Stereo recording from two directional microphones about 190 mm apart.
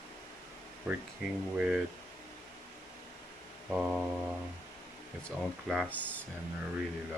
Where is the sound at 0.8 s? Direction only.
5° right (ahead or behind).